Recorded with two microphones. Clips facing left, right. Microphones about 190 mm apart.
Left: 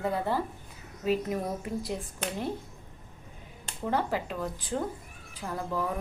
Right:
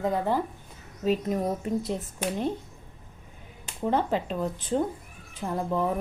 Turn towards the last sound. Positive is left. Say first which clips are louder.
# right 5 dB
turn(degrees=-25)  # may be behind; listen again after turning